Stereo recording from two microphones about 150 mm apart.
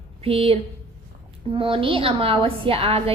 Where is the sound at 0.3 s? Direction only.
40° right (ahead or behind).